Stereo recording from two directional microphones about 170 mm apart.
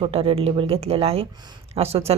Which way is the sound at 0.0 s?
35° right (ahead or behind).